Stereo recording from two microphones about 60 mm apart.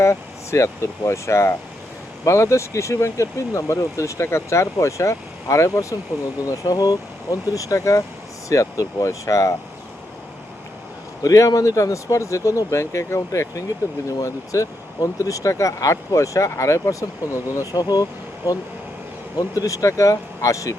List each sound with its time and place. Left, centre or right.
0.0 s speech: left
6.4 s speech: left
11.2 s speech: left
14.2 s speech: left
19.4 s speech: left